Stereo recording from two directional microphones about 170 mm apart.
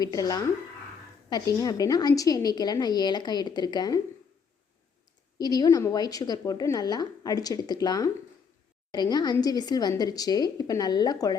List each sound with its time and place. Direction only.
0.0 s a woman's voice: 20° left (ahead or behind)
5.4 s a woman's voice: 20° left (ahead or behind)